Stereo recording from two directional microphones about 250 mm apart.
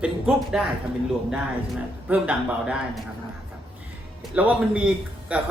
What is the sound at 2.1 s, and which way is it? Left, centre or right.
Speech, centre.